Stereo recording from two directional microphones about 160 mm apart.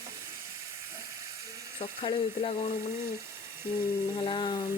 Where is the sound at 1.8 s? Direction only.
30° left (ahead or behind).